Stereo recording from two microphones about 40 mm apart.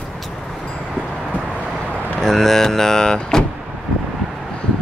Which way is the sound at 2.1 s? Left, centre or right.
Centre.